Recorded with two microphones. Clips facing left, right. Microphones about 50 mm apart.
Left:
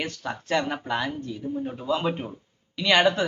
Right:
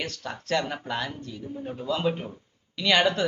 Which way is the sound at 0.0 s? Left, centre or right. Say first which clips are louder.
Left 3 dB; centre.